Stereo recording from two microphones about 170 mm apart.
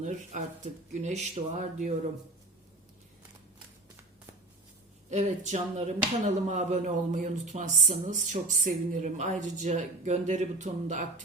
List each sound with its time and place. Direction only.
0.0 s speech: 45° right (ahead or behind)
5.1 s speech: 45° right (ahead or behind)